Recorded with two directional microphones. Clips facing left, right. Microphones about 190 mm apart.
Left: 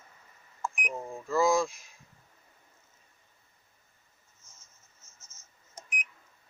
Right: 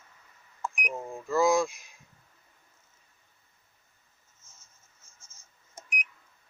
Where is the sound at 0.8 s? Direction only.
Centre (ahead or behind).